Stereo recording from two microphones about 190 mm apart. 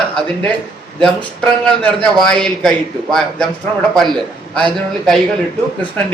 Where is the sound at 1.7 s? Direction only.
5° left (ahead or behind).